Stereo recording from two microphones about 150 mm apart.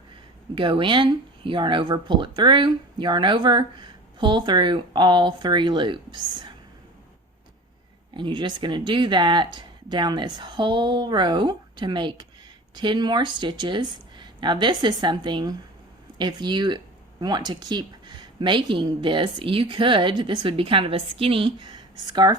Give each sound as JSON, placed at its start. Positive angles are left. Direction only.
{"t": 0.5, "sound": "speech", "side_deg": -35}
{"t": 8.1, "sound": "speech", "side_deg": -30}